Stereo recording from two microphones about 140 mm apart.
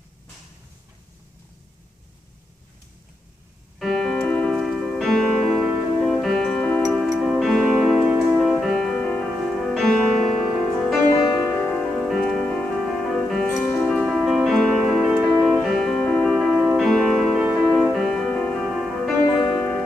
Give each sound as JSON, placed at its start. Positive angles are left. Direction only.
{"t": 3.8, "sound": "music", "side_deg": 5}
{"t": 11.1, "sound": "music", "side_deg": 15}
{"t": 11.9, "sound": "music", "side_deg": 0}